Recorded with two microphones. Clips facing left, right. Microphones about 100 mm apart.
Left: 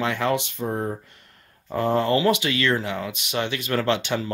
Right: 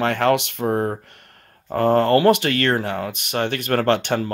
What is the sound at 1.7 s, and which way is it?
Speech, 55° right (ahead or behind).